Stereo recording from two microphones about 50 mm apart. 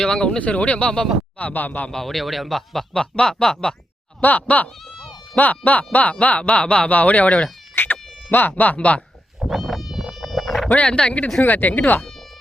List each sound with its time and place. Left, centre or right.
0.0 s speech: centre
1.4 s speech: left
1.9 s speech: centre
4.2 s speech: left
7.8 s speech: left
9.5 s cat: centre
10.7 s speech: left
11.4 s speech: left